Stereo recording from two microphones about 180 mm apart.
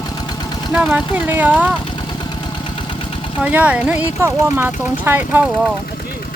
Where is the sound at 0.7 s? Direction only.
5° right (ahead or behind).